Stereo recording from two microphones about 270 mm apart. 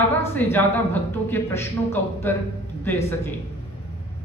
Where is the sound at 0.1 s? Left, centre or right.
Centre.